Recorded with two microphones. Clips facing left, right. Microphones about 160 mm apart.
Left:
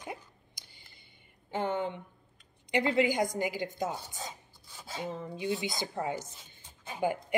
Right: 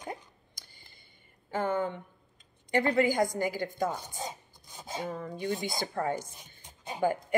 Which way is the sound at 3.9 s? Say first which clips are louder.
Right 3 dB; 20° right (ahead or behind).